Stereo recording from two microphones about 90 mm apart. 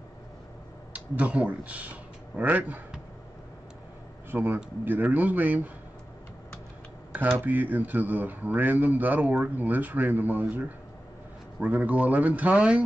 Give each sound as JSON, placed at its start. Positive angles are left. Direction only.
{"t": 0.9, "sound": "speech", "side_deg": -15}
{"t": 4.3, "sound": "a man's voice", "side_deg": -20}
{"t": 7.1, "sound": "speech", "side_deg": -25}
{"t": 11.6, "sound": "speech", "side_deg": -15}